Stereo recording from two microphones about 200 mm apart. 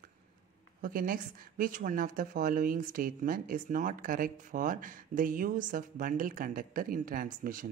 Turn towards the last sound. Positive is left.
turn(degrees=-45)  # may be behind; listen again after turning